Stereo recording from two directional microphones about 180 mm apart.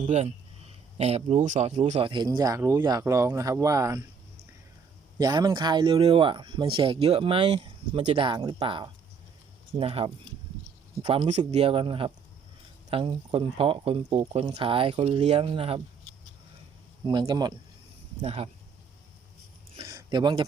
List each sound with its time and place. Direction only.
0.0 s speech: 35° right (ahead or behind); by 4.0 s 20° right (ahead or behind)
5.2 s speech: 20° right (ahead or behind)
17.1 s speech: 25° right (ahead or behind)
19.8 s a sound: 20° right (ahead or behind)